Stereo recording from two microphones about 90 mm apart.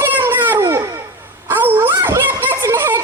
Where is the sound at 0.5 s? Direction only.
35° right (ahead or behind).